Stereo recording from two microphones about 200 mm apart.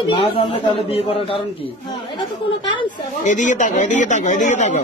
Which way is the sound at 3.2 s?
40° left (ahead or behind).